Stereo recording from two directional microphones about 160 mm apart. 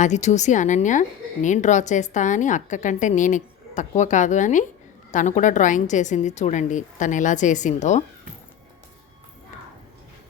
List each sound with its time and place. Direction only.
0.0 s a woman's voice: 45° left (ahead or behind)